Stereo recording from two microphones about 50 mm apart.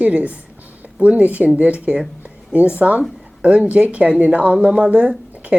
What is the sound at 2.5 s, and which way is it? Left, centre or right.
A woman's voice, right.